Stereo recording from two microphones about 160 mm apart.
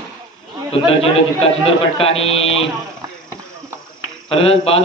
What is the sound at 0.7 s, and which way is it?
A man's voice, 35° left (ahead or behind).